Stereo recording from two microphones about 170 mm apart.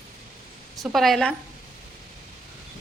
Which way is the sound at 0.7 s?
Centre (ahead or behind).